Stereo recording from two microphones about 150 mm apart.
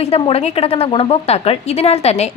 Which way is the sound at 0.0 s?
45° left (ahead or behind).